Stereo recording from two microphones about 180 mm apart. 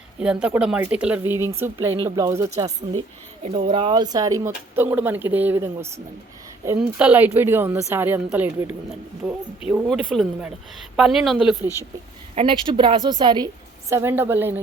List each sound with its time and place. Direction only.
0.2 s speech: 5° right (ahead or behind)
3.4 s speech: 30° right (ahead or behind); by 11.7 s centre (ahead or behind)
12.3 s a woman's voice: 30° right (ahead or behind)
13.9 s speech: 15° right (ahead or behind)